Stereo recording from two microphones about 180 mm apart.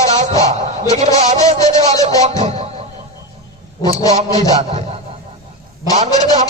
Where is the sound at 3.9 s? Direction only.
20° left (ahead or behind).